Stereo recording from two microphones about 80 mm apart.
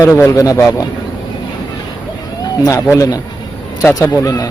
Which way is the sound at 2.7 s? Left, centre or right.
Left.